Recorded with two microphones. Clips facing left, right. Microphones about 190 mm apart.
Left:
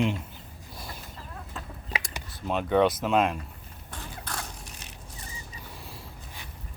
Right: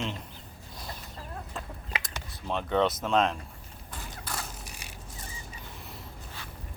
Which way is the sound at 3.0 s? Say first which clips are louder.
Left 2 dB; 10° left (ahead or behind).